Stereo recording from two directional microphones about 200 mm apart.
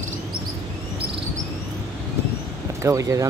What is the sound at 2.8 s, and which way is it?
Speech, 15° right (ahead or behind).